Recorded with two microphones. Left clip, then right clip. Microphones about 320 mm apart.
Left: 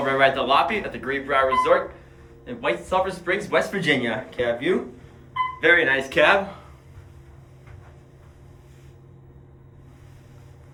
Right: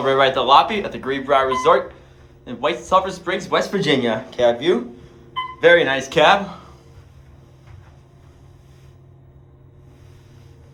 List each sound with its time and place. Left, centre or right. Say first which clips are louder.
0.0 s speech: right 3 dB; centre